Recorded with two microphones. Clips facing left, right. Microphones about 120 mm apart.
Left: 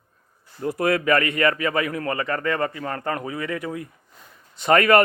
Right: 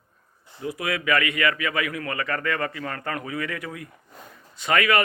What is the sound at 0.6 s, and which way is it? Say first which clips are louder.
Speech: left 7 dB; 45° left (ahead or behind).